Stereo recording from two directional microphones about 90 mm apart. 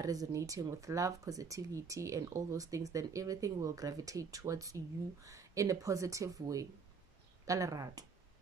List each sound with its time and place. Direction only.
0.0 s speech: 40° right (ahead or behind)